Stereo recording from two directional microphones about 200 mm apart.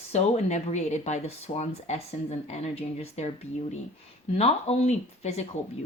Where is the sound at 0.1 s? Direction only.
35° left (ahead or behind).